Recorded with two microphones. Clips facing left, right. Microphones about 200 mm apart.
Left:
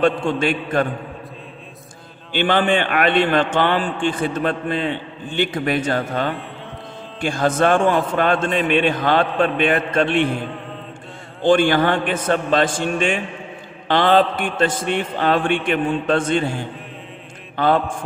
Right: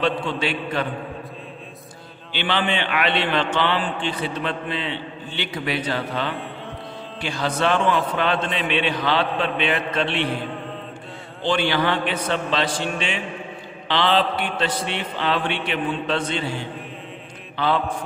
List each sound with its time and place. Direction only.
0.0 s a man's voice: 50° left (ahead or behind)
2.3 s a man's voice: 50° left (ahead or behind)
11.4 s a man's voice: 50° left (ahead or behind)